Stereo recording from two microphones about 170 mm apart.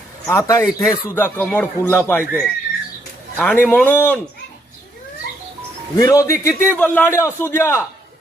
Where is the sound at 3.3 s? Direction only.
10° left (ahead or behind).